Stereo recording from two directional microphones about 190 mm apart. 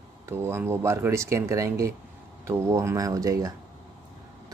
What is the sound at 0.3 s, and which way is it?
Speech, 10° right (ahead or behind).